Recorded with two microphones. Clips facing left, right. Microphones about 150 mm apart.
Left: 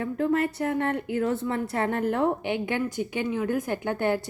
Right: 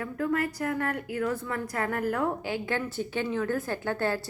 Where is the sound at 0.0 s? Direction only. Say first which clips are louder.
Left 4 dB; 25° left (ahead or behind).